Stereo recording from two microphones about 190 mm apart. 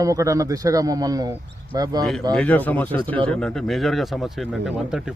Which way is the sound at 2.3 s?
10° left (ahead or behind).